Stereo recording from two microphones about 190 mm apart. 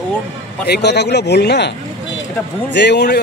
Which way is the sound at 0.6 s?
60° left (ahead or behind).